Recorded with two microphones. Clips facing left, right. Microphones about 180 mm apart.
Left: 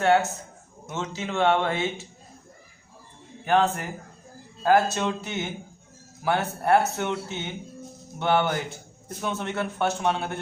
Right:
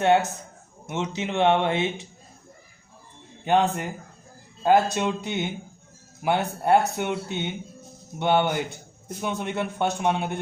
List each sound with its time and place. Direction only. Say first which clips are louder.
0.0 s speech: right 1 dB; 20° right (ahead or behind)
3.4 s speech: right 1 dB; 20° right (ahead or behind)